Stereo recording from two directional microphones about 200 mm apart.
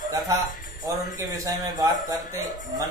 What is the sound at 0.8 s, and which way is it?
A man's voice, 20° right (ahead or behind).